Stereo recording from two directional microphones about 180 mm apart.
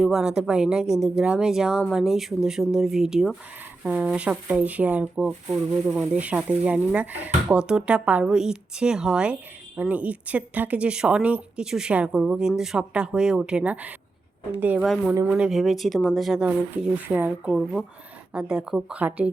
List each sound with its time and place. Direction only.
0.0 s speech: 5° right (ahead or behind)
15.1 s speech: 15° right (ahead or behind)
15.4 s speech: centre (ahead or behind)